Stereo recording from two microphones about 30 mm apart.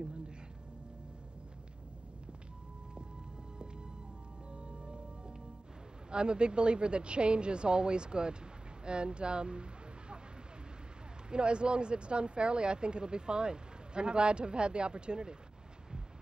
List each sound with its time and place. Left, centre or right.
4.5 s music: right
6.0 s speech: right
11.2 s speech: right